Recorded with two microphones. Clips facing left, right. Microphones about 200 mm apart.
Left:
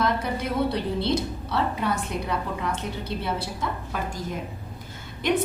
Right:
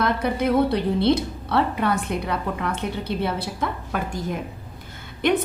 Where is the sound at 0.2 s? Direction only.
60° right (ahead or behind).